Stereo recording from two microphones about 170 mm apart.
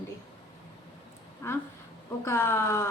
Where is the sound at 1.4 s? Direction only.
15° left (ahead or behind).